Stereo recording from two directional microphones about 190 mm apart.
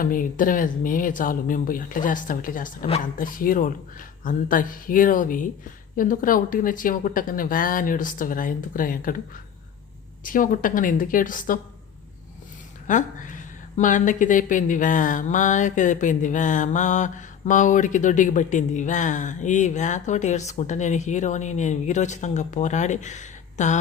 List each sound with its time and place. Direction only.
0.0 s speech: 45° left (ahead or behind)
10.2 s speech: 45° left (ahead or behind)
12.9 s a woman's voice: 40° left (ahead or behind)